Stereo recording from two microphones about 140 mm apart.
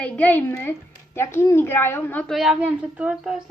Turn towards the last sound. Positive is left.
turn(degrees=-5)  # may be behind; listen again after turning